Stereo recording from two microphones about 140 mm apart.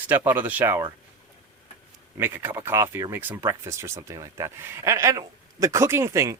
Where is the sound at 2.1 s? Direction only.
15° right (ahead or behind).